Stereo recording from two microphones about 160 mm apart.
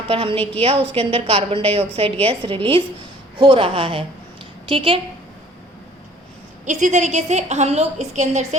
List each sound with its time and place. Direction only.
0.1 s a woman's voice: 35° right (ahead or behind)
6.7 s a woman's voice: 50° right (ahead or behind)